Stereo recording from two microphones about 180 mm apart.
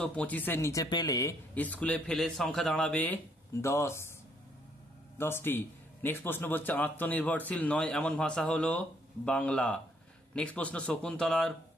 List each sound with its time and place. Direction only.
0.0 s a man's voice: 5° left (ahead or behind)
1.5 s a man's voice: 10° left (ahead or behind)
5.1 s a man's voice: 15° left (ahead or behind)